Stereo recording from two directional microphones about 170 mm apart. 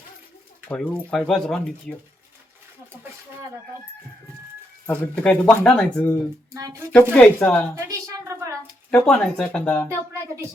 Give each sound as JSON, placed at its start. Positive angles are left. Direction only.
{"t": 0.7, "sound": "speech", "side_deg": 5}
{"t": 4.9, "sound": "speech", "side_deg": 5}
{"t": 6.5, "sound": "speech", "side_deg": -20}
{"t": 7.1, "sound": "speech", "side_deg": 10}
{"t": 7.8, "sound": "a sound", "side_deg": -20}
{"t": 8.9, "sound": "speech", "side_deg": 5}